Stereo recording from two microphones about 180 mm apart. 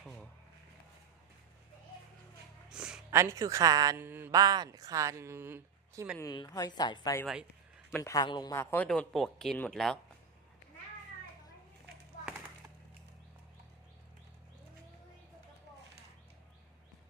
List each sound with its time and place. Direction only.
0.0 s a sound: 5° left (ahead or behind)
2.6 s speech: 5° right (ahead or behind)
6.1 s speech: 20° left (ahead or behind); by 10.0 s 5° left (ahead or behind)